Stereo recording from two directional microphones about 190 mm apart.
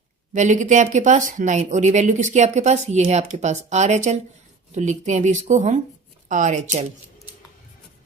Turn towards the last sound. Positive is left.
turn(degrees=-40)  # may be behind; listen again after turning